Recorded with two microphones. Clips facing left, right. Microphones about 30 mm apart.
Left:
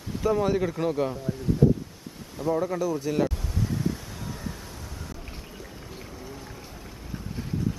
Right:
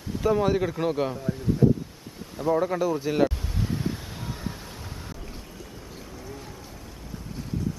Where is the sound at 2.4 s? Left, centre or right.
Centre.